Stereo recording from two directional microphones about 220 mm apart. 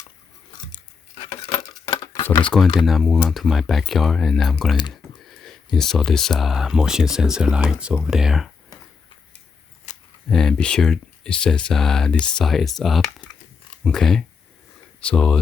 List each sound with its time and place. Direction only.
1.2 s a sound: 20° left (ahead or behind)
2.2 s speech: 20° left (ahead or behind)
2.8 s speech: centre (ahead or behind)
4.9 s computer keyboard: centre (ahead or behind)
5.7 s speech: centre (ahead or behind)
9.9 s a sound: 30° left (ahead or behind)
10.2 s speech: 5° left (ahead or behind)